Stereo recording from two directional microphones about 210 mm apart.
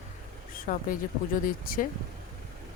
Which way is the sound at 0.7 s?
40° left (ahead or behind).